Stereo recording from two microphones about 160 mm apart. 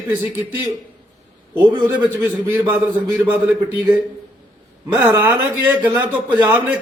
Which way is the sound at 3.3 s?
10° right (ahead or behind).